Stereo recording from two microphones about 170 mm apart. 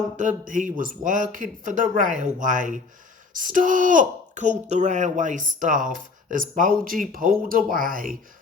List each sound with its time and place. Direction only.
0.2 s speech: 50° right (ahead or behind)